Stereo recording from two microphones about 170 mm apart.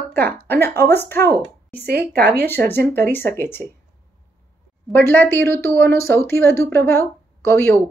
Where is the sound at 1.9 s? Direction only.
70° right (ahead or behind).